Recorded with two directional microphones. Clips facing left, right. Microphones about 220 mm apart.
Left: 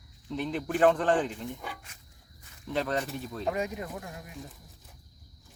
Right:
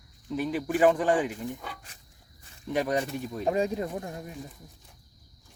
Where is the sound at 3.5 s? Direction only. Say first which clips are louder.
Right 6 dB; 30° right (ahead or behind).